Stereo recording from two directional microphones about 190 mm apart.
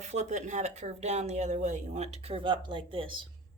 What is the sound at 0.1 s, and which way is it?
Speech, 40° right (ahead or behind).